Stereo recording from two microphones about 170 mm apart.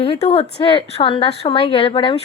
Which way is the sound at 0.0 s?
35° left (ahead or behind).